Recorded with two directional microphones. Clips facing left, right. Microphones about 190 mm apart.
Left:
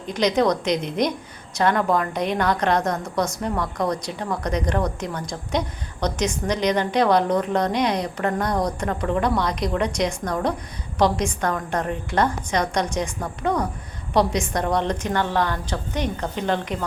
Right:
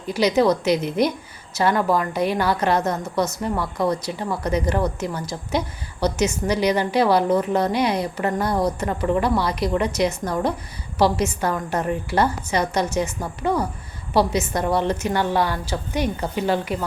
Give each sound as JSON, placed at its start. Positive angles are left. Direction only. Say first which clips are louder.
{"t": 0.1, "sound": "a woman's voice", "louder": "right 2 dB", "side_deg": -5}